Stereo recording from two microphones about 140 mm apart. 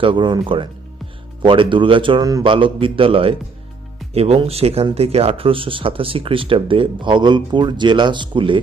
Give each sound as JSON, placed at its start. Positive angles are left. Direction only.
{"t": 0.0, "sound": "speech", "side_deg": -35}